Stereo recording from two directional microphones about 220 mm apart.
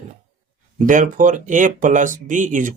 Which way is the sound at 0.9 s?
35° right (ahead or behind).